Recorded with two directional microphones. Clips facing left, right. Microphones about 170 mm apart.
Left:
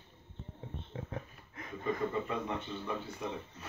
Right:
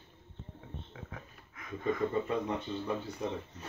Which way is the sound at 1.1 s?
30° left (ahead or behind).